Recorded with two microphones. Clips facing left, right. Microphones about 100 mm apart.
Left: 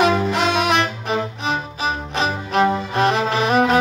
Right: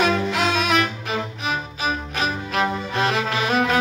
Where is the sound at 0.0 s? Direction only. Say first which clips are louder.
Left 3 dB; 30° left (ahead or behind).